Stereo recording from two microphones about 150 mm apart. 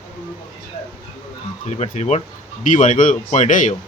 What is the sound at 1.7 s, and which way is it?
Speech, 50° left (ahead or behind).